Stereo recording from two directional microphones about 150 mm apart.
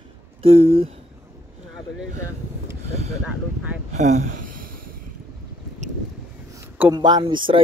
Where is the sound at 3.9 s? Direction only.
50° right (ahead or behind); by 4.9 s 70° right (ahead or behind).